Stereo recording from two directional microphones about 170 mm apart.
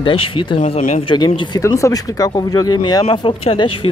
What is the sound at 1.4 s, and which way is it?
Speech, 25° left (ahead or behind).